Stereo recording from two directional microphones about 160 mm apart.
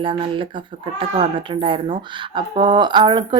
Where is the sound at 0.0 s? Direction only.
35° right (ahead or behind).